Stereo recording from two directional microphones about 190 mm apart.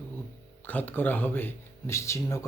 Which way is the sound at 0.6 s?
10° left (ahead or behind).